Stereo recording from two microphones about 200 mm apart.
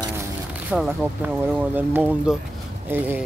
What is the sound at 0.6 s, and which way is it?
Speech, 10° right (ahead or behind).